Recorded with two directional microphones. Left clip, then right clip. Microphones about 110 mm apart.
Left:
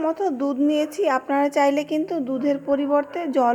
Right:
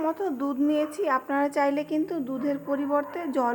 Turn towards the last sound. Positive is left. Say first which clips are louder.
# left 6 dB
turn(degrees=30)  # may be behind; listen again after turning